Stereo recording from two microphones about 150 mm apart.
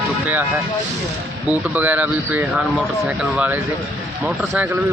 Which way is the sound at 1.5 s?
10° right (ahead or behind).